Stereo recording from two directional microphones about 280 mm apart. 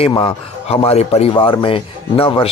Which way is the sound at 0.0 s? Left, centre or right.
Centre.